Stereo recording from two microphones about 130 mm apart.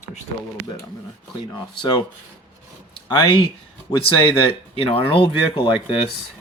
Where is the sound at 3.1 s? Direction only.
40° left (ahead or behind).